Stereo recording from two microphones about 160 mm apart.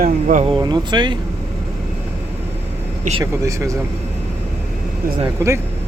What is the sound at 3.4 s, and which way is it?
Speech, 20° right (ahead or behind).